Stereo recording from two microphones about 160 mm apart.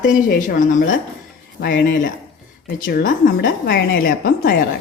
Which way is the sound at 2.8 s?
75° left (ahead or behind).